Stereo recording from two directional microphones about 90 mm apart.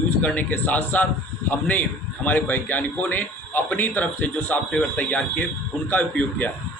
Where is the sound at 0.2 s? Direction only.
15° left (ahead or behind).